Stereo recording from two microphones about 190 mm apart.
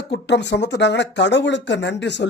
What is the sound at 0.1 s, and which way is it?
A man's voice, 65° left (ahead or behind).